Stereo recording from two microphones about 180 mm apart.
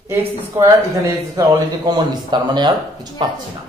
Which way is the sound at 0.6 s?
15° right (ahead or behind).